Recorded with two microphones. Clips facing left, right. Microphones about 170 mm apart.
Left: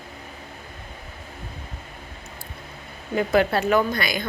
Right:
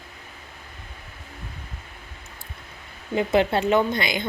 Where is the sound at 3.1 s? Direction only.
20° right (ahead or behind).